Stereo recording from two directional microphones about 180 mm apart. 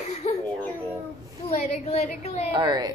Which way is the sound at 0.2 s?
40° left (ahead or behind).